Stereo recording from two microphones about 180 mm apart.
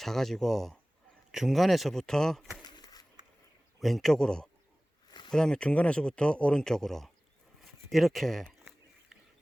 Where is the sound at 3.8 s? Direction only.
Centre (ahead or behind).